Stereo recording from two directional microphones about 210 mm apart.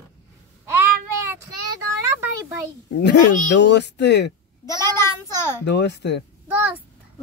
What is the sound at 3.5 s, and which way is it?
Speech, 55° left (ahead or behind).